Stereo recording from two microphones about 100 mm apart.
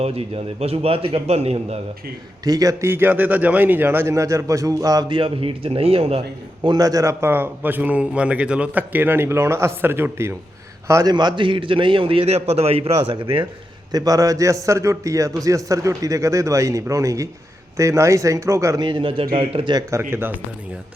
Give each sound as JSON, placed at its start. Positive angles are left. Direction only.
{"t": 0.0, "sound": "a man's voice", "side_deg": -85}
{"t": 2.4, "sound": "a man's voice", "side_deg": -40}
{"t": 2.9, "sound": "a man's voice", "side_deg": -20}
{"t": 5.0, "sound": "speech", "side_deg": -60}
{"t": 6.6, "sound": "a man's voice", "side_deg": -45}
{"t": 11.1, "sound": "a man's voice", "side_deg": -50}
{"t": 13.0, "sound": "speech", "side_deg": -55}
{"t": 13.9, "sound": "a man's voice", "side_deg": -40}
{"t": 18.8, "sound": "a man's voice", "side_deg": -55}
{"t": 19.9, "sound": "a man's voice", "side_deg": -25}